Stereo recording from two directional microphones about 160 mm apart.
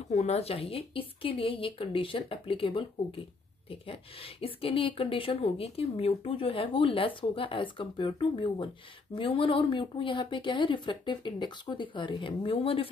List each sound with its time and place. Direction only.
0.1 s speech: 40° left (ahead or behind)